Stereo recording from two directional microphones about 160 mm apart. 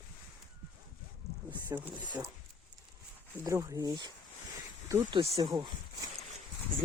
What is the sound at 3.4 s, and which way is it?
Speech, 20° right (ahead or behind).